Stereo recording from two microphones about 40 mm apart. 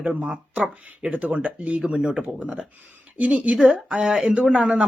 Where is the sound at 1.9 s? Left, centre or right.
Right.